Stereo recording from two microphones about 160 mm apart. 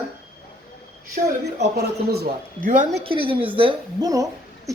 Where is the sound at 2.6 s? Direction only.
55° right (ahead or behind).